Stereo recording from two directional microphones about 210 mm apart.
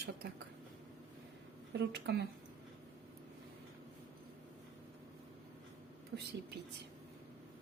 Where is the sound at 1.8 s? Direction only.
50° right (ahead or behind).